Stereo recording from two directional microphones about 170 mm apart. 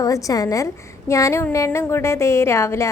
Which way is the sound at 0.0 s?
20° left (ahead or behind).